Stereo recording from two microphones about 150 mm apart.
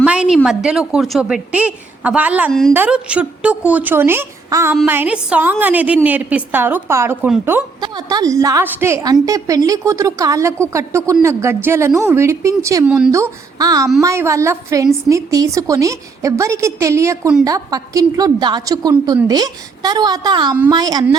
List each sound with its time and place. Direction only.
0.0 s a woman's voice: 5° right (ahead or behind)
2.5 s a woman's voice: 5° left (ahead or behind)
2.7 s a woman's voice: 10° right (ahead or behind)
7.8 s a woman's voice: 25° right (ahead or behind)